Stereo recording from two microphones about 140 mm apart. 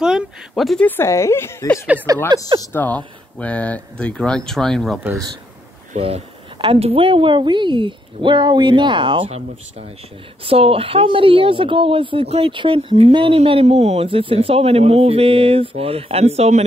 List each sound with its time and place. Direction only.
0.0 s speech: centre (ahead or behind)
0.8 s a woman's voice: 20° left (ahead or behind)
2.3 s speech: 30° right (ahead or behind)
2.7 s speech: 10° left (ahead or behind)
5.9 s speech: 45° right (ahead or behind)